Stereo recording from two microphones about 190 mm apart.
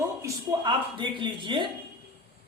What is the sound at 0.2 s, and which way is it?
Speech, 20° right (ahead or behind).